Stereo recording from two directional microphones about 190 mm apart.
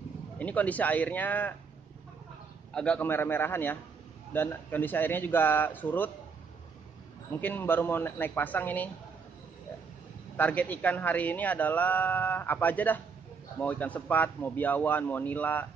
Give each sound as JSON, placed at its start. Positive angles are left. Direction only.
{"t": 0.4, "sound": "a man's voice", "side_deg": 10}
{"t": 2.7, "sound": "a man's voice", "side_deg": 5}
{"t": 7.3, "sound": "a man's voice", "side_deg": 10}
{"t": 10.3, "sound": "a man's voice", "side_deg": 10}